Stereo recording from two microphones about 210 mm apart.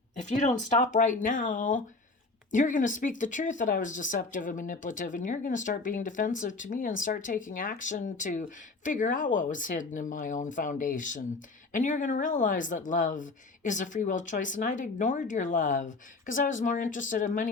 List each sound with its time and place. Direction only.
0.2 s speech: 35° left (ahead or behind)